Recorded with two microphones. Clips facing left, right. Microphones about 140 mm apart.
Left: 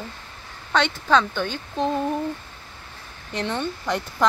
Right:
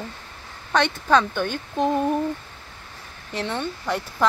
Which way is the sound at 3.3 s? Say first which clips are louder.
Left 1 dB; 5° right (ahead or behind).